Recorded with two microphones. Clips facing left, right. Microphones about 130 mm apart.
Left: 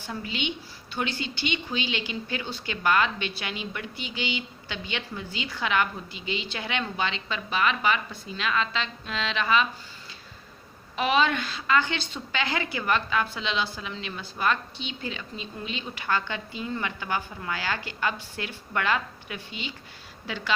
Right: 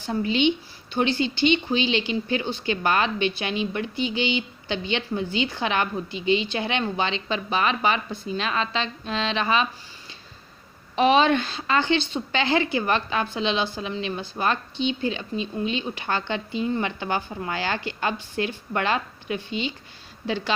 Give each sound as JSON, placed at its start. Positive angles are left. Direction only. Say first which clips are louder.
{"t": 0.0, "sound": "a woman's voice", "louder": "right 10 dB", "side_deg": -30}
{"t": 10.9, "sound": "a woman's voice", "louder": "right 6 dB", "side_deg": -25}